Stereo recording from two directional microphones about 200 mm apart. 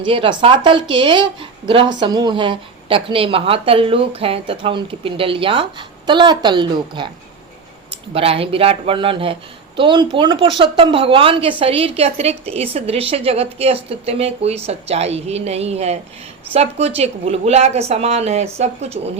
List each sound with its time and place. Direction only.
0.0 s a woman's voice: 25° right (ahead or behind)
8.1 s a woman's voice: 30° right (ahead or behind)